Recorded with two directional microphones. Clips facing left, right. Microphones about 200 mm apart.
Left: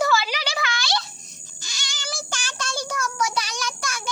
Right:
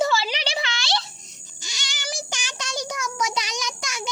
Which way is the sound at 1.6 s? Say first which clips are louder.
Right 1 dB; 20° right (ahead or behind).